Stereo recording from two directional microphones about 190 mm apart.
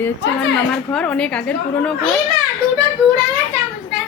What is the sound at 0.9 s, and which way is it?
A woman's voice, 5° left (ahead or behind).